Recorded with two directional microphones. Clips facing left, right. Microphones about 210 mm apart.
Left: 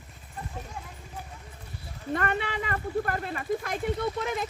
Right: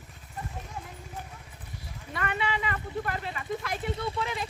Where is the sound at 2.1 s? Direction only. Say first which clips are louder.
Left 3 dB; 50° left (ahead or behind).